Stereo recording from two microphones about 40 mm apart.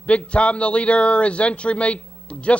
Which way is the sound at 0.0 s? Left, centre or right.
Left.